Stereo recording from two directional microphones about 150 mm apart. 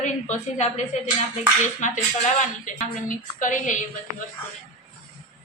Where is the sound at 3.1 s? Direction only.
60° left (ahead or behind).